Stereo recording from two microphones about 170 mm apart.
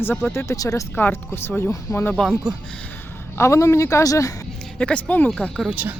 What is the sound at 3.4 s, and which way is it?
Speech, 15° left (ahead or behind).